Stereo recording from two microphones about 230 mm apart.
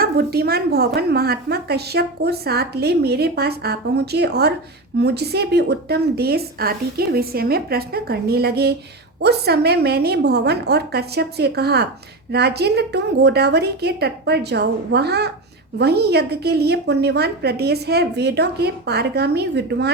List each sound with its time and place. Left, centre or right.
0.0 s a woman's voice: right